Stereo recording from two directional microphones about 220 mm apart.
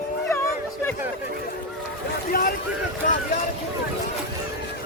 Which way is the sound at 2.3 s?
40° left (ahead or behind).